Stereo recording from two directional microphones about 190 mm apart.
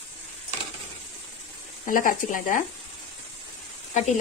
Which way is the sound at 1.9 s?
45° left (ahead or behind).